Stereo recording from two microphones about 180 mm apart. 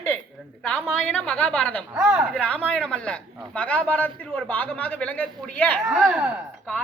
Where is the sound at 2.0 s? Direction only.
5° right (ahead or behind).